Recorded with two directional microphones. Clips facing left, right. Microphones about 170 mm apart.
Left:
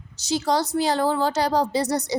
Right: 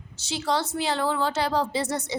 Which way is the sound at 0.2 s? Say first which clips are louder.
Left 4 dB; 40° left (ahead or behind).